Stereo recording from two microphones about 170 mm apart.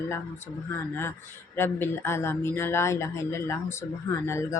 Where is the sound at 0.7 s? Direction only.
15° left (ahead or behind).